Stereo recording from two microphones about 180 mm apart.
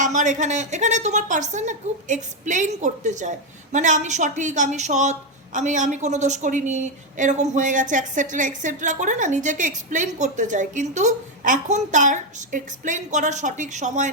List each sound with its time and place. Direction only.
0.0 s a woman's voice: 45° right (ahead or behind)